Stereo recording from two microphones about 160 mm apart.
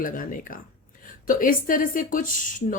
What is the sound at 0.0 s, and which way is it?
Speech, 60° left (ahead or behind).